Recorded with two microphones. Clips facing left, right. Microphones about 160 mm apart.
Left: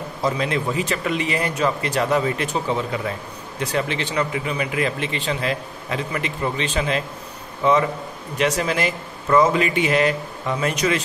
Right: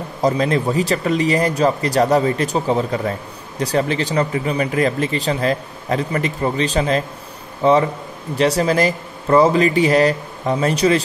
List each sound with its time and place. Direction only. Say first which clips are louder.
0.2 s speech: right 5 dB; 40° right (ahead or behind)